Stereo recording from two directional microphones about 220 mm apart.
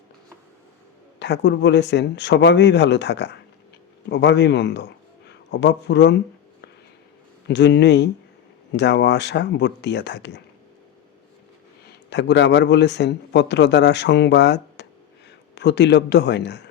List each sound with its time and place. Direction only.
1.2 s a man's voice: 50° left (ahead or behind)
7.4 s a man's voice: 50° left (ahead or behind)
11.9 s a man's voice: 50° left (ahead or behind)